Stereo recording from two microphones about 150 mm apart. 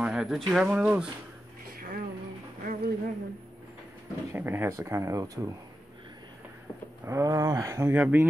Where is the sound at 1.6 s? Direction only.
80° right.